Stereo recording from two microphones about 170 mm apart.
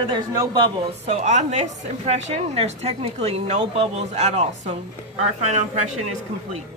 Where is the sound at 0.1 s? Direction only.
20° right (ahead or behind).